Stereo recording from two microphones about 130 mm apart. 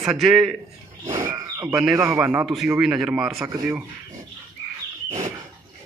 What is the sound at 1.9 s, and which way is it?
Speech, 20° right (ahead or behind).